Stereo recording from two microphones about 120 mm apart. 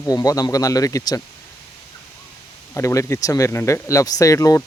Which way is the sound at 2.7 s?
25° left (ahead or behind).